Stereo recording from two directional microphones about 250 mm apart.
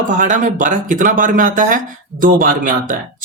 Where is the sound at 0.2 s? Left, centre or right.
Right.